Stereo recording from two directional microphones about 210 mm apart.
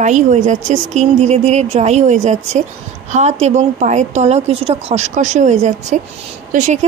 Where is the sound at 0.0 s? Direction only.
35° right (ahead or behind).